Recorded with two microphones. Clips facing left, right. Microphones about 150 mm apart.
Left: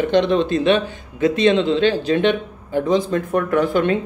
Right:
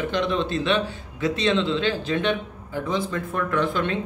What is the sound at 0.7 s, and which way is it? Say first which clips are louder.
A man's voice: left 5 dB; 55° left (ahead or behind).